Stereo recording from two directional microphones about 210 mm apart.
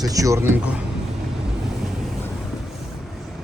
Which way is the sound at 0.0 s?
15° right (ahead or behind).